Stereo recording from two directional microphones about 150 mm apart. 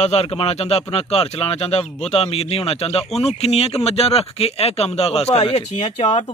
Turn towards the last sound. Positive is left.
turn(degrees=45)  # may be behind; listen again after turning